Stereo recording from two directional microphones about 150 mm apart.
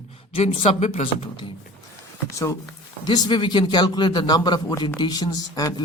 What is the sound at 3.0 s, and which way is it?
Speech, 30° left (ahead or behind).